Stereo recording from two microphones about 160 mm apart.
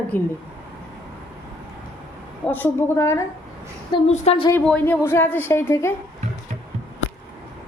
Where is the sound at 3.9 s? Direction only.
30° left (ahead or behind).